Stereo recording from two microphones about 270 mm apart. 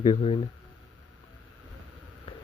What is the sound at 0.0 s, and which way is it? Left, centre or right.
Speech, left.